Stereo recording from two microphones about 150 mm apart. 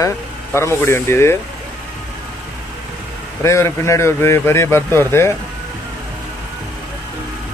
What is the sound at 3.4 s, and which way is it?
Speech, 20° left (ahead or behind).